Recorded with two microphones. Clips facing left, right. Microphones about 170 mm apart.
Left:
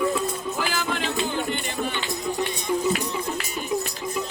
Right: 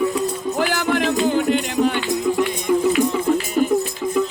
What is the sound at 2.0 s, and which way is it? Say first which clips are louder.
Music: right 8 dB; 50° right (ahead or behind).